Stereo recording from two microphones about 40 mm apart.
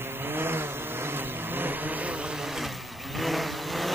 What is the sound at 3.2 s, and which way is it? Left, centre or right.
Vehicle, centre.